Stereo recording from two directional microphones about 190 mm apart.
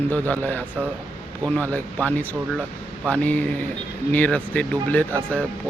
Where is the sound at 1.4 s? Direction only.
5° left (ahead or behind).